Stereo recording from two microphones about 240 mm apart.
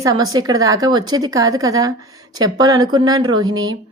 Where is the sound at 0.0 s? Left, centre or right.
Centre.